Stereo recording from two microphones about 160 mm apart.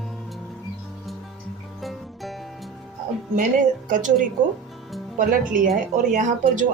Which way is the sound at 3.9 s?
55° right (ahead or behind).